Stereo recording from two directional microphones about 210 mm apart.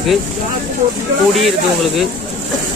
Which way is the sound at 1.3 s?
Centre (ahead or behind).